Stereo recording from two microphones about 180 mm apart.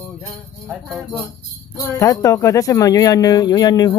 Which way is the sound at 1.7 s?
20° left (ahead or behind).